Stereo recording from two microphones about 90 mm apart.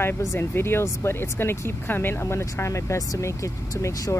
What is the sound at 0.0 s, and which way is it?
Speech, 30° left (ahead or behind).